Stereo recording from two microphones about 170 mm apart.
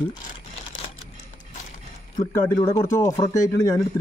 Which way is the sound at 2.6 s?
30° left (ahead or behind).